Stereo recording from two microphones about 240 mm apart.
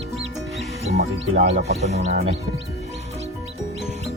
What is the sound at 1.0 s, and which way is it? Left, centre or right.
Speech, right.